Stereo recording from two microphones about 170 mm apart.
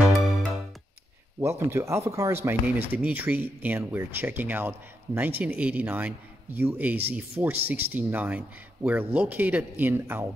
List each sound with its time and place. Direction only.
0.0 s music: centre (ahead or behind)
1.4 s speech: 15° right (ahead or behind)